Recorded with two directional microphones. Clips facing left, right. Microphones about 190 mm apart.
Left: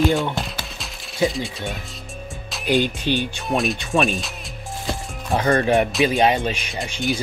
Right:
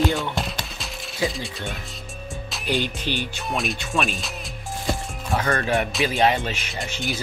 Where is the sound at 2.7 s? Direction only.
15° left (ahead or behind).